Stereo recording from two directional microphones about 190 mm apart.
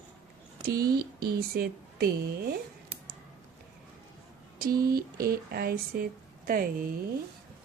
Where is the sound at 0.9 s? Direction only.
55° right (ahead or behind).